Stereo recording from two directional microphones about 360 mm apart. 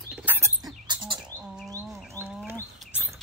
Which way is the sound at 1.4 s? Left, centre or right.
Centre.